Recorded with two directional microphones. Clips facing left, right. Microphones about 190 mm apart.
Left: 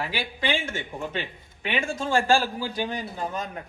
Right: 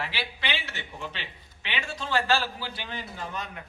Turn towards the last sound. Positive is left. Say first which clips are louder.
# left 5 dB
turn(degrees=45)  # may be behind; listen again after turning